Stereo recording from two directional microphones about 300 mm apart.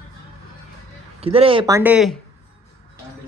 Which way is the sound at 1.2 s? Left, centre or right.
Centre.